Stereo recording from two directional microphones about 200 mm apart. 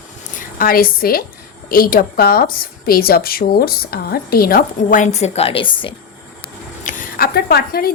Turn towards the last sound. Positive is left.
turn(degrees=50)  # may be behind; listen again after turning